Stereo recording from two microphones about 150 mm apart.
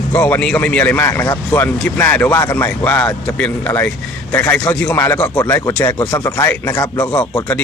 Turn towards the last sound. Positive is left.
turn(degrees=10)  # may be behind; listen again after turning